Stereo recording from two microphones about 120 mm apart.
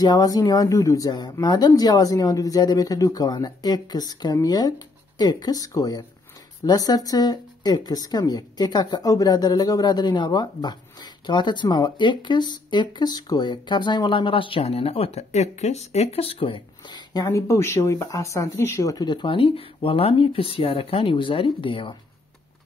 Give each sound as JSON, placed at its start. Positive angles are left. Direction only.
{"t": 0.0, "sound": "speech", "side_deg": 35}